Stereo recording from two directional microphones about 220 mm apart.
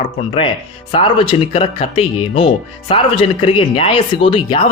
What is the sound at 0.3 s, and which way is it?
Speech, 25° left (ahead or behind).